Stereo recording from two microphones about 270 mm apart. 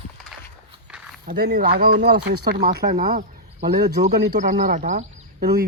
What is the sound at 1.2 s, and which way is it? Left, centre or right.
Speech, right.